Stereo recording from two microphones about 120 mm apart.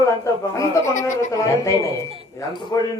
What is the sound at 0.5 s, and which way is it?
A man's voice, 25° left (ahead or behind).